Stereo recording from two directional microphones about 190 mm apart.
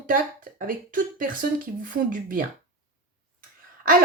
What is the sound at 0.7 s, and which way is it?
Speech, 45° right (ahead or behind).